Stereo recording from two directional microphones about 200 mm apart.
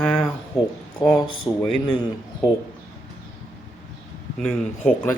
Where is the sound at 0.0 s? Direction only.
5° left (ahead or behind).